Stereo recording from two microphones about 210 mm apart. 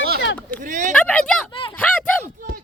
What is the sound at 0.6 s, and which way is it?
Speech, 40° right (ahead or behind).